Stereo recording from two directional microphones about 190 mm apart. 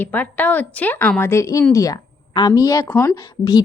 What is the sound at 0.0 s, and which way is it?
A woman's voice, 10° left (ahead or behind).